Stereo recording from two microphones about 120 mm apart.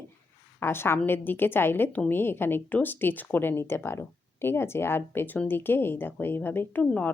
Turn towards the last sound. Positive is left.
turn(degrees=10)  # may be behind; listen again after turning